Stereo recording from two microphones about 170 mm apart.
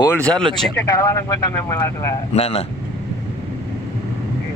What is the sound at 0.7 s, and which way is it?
Speech, 15° left (ahead or behind).